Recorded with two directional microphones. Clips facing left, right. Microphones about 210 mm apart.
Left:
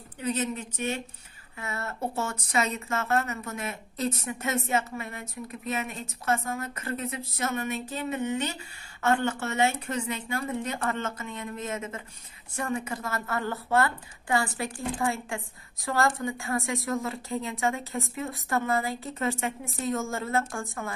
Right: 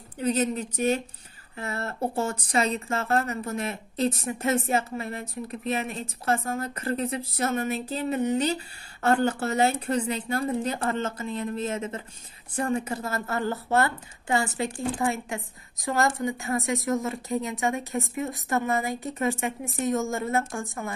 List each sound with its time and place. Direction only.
0.2 s a woman's voice: 40° right (ahead or behind); by 20.6 s 20° right (ahead or behind)